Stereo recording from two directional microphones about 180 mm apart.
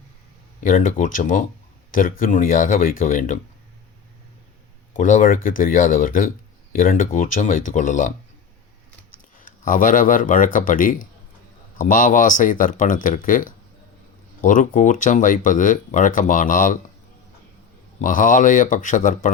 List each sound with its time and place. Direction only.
0.6 s speech: 50° left (ahead or behind)
4.9 s speech: 45° left (ahead or behind)
9.4 s speech: 50° left (ahead or behind)
18.0 s speech: 45° left (ahead or behind)